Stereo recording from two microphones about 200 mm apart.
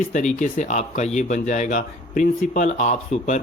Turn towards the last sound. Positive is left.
turn(degrees=35)  # may be behind; listen again after turning